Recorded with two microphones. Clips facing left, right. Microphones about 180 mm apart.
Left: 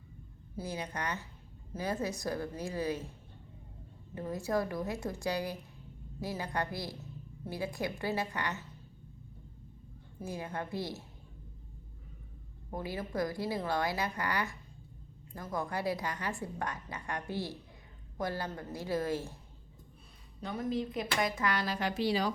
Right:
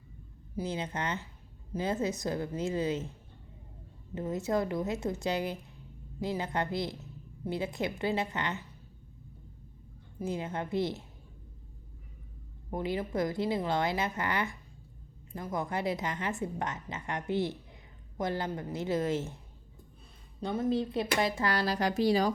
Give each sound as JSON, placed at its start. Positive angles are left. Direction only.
{"t": 0.5, "sound": "a woman's voice", "side_deg": -20}
{"t": 4.1, "sound": "a woman's voice", "side_deg": -20}
{"t": 10.2, "sound": "a woman's voice", "side_deg": -20}
{"t": 12.7, "sound": "a woman's voice", "side_deg": -20}
{"t": 20.4, "sound": "speech", "side_deg": -25}